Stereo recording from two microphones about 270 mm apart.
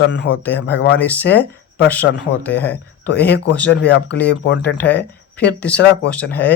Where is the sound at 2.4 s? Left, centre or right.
Centre.